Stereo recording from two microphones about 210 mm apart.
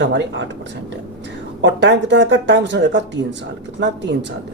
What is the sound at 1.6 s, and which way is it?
Speech, 55° right (ahead or behind).